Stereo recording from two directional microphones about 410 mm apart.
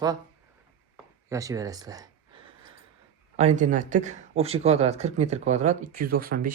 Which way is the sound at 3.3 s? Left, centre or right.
Centre.